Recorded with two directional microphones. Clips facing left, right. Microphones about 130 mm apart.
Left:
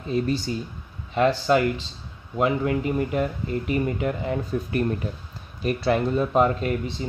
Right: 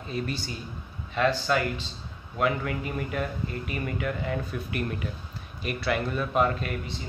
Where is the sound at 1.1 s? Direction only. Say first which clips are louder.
Left 5 dB; 30° left (ahead or behind).